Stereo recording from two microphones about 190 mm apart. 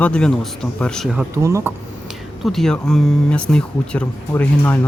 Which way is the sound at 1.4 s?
15° right (ahead or behind).